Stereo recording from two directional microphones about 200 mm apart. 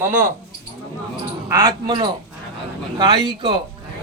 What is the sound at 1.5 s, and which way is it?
A man's voice, 15° right (ahead or behind).